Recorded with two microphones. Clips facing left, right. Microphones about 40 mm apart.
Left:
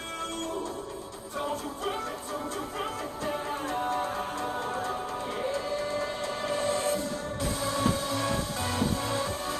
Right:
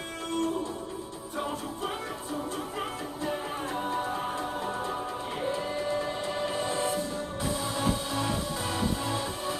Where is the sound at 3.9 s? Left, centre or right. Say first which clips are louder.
Even; right.